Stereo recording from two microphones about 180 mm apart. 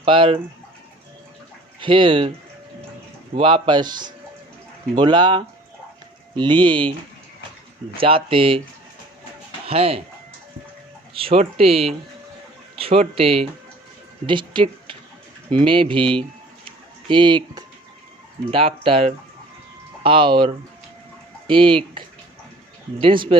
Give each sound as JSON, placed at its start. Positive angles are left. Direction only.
{"t": 0.0, "sound": "speech", "side_deg": -30}
{"t": 1.8, "sound": "speech", "side_deg": -30}
{"t": 3.3, "sound": "speech", "side_deg": -30}
{"t": 7.9, "sound": "speech", "side_deg": -30}
{"t": 9.6, "sound": "speech", "side_deg": -35}
{"t": 11.1, "sound": "speech", "side_deg": -30}
{"t": 16.6, "sound": "music", "side_deg": -25}
{"t": 18.5, "sound": "speech", "side_deg": -30}